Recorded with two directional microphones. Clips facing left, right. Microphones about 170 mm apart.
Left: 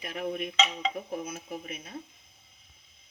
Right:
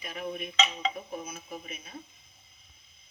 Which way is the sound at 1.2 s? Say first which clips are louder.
Left 3 dB; 80° left.